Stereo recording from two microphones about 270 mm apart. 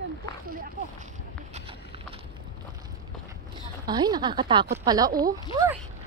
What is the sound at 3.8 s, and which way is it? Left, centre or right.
Speech, centre.